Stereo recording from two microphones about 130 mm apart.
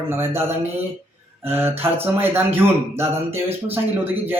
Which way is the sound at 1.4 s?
15° right (ahead or behind).